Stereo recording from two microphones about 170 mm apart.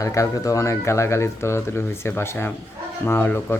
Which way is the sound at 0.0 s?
20° left (ahead or behind).